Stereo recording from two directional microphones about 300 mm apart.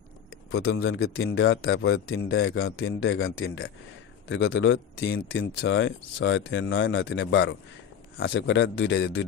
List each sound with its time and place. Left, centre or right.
0.5 s speech: left